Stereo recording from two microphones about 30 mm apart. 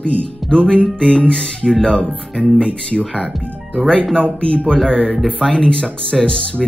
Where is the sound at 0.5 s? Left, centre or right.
Left.